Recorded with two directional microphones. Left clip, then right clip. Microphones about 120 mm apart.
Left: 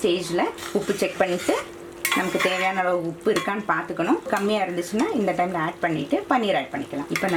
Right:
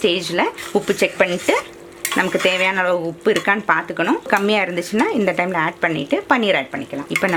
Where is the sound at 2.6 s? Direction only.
30° right (ahead or behind).